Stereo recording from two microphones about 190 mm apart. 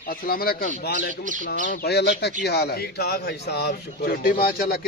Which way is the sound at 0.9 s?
45° right (ahead or behind).